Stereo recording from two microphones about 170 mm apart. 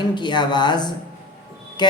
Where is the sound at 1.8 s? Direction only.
25° left (ahead or behind).